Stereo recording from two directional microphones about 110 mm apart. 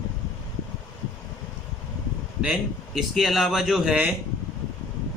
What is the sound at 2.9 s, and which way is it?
A man's voice, centre (ahead or behind).